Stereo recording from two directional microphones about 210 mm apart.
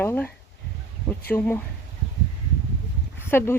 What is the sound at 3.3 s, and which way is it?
Speech, 10° left (ahead or behind).